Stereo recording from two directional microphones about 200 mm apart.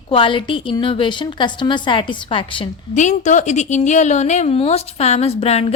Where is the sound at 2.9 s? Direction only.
35° left (ahead or behind).